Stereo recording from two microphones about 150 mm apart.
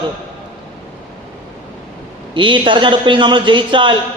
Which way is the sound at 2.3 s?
35° right (ahead or behind).